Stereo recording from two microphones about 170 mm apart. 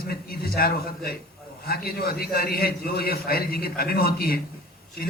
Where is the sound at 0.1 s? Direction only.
65° left (ahead or behind).